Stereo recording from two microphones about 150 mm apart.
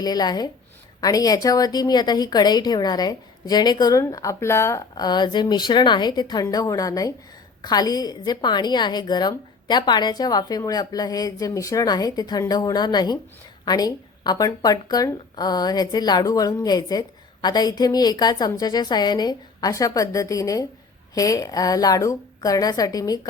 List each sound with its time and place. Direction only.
0.0 s speech: 25° left (ahead or behind)